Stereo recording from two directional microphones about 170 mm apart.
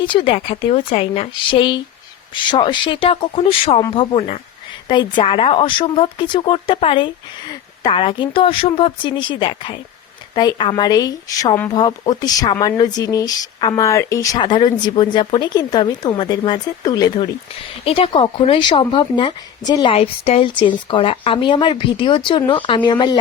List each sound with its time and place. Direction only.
0.0 s speech: 30° left (ahead or behind)
17.8 s speech: 35° left (ahead or behind)